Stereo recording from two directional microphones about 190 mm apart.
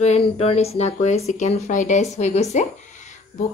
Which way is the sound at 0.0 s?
35° left (ahead or behind).